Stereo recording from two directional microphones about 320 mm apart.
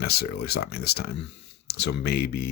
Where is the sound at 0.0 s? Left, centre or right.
Left.